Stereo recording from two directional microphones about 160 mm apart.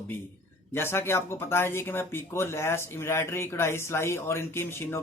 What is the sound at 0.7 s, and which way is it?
Speech, 15° left (ahead or behind).